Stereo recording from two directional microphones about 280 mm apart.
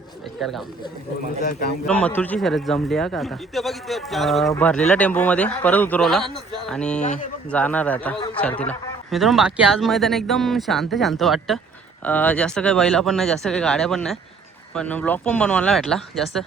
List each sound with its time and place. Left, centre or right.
0.3 s a man's voice: centre
1.4 s a man's voice: left
1.9 s a man's voice: centre